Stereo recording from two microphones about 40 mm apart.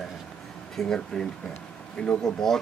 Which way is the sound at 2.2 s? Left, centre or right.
Centre.